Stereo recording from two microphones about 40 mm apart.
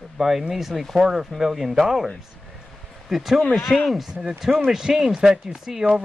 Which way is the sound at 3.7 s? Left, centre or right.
Left.